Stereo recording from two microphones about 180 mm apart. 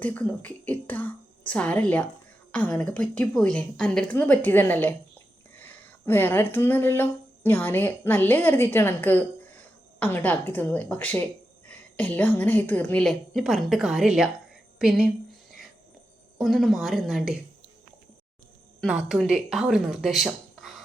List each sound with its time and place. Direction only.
0.0 s speech: 10° left (ahead or behind)
14.8 s a sound: 5° right (ahead or behind)
16.4 s speech: centre (ahead or behind)
18.8 s speech: centre (ahead or behind)